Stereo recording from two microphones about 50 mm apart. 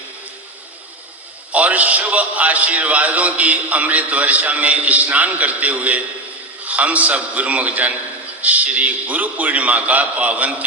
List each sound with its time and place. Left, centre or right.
1.5 s a man's voice: right